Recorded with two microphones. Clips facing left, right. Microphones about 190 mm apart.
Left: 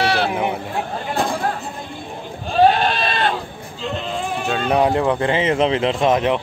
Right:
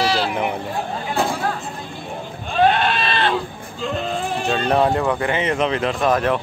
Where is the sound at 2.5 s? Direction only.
35° left (ahead or behind).